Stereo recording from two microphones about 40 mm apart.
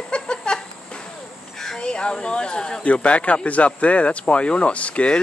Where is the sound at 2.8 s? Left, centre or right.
Left.